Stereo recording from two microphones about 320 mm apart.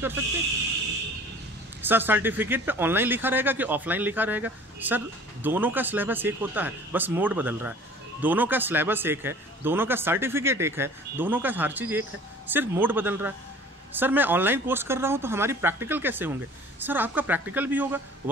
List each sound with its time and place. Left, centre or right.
1.8 s speech: centre